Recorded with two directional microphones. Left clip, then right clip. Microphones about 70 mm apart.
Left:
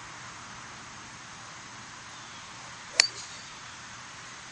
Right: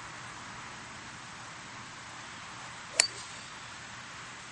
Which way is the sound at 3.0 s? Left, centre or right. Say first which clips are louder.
Left 5 dB; left.